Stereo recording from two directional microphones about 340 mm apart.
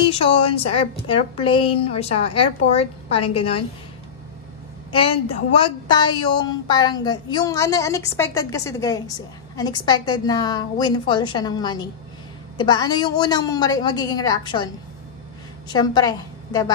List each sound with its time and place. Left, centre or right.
0.0 s a woman's voice: centre
4.9 s a woman's voice: centre
15.7 s a woman's voice: centre